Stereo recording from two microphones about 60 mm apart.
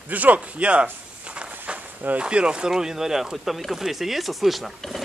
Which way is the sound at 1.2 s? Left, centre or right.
Right.